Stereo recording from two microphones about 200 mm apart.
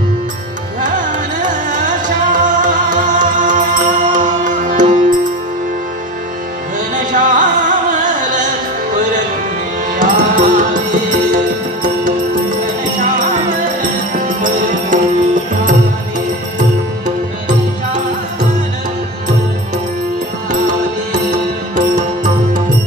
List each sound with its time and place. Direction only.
1.4 s music: 40° right (ahead or behind)
7.0 s music: 40° right (ahead or behind)
9.9 s music: 40° right (ahead or behind)
13.1 s music: 40° right (ahead or behind)
21.7 s music: 40° right (ahead or behind)